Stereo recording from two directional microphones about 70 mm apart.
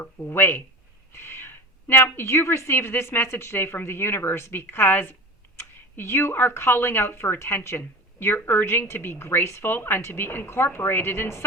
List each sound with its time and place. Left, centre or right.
0.0 s speech: left